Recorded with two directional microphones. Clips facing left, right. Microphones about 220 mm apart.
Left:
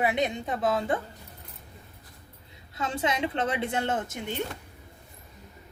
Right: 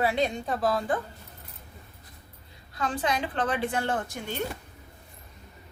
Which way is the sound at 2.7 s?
25° left (ahead or behind).